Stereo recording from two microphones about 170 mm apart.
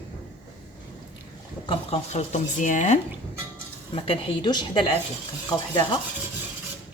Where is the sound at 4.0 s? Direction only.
30° left (ahead or behind).